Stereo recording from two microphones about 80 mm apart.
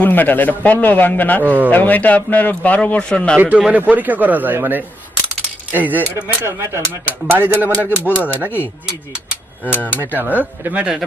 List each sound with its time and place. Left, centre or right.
0.0 s a man's voice: left
3.3 s speech: centre
6.2 s speech: right
7.1 s speech: right
9.7 s a man's voice: left
10.0 s speech: right